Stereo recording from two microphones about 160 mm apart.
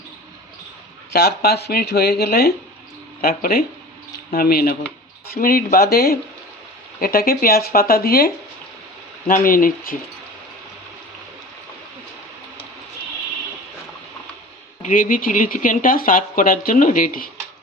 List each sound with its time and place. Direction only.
1.1 s speech: 75° left (ahead or behind)
7.0 s speech: 65° left (ahead or behind)
14.8 s speech: 55° left (ahead or behind)